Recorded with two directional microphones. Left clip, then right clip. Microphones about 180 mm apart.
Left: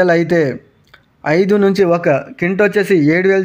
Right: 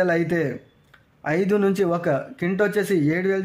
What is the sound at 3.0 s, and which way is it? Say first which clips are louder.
Speech: left 10 dB; 40° left (ahead or behind).